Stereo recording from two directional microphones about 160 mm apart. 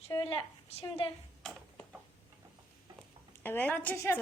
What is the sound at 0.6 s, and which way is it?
Speech, 40° left (ahead or behind).